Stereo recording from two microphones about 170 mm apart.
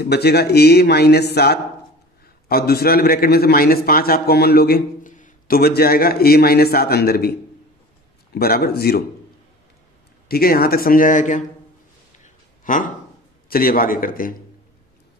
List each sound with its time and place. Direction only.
0.0 s a man's voice: 70° left (ahead or behind)
8.4 s a man's voice: 65° left (ahead or behind)
10.2 s a man's voice: 65° left (ahead or behind); by 11.4 s 50° left (ahead or behind)
12.6 s a man's voice: 50° left (ahead or behind)